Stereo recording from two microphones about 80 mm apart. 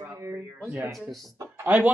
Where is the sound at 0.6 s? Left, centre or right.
Right.